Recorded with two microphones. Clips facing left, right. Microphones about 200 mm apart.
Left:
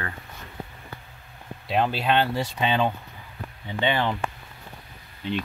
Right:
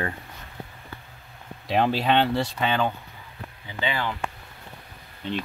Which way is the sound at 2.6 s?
20° left (ahead or behind).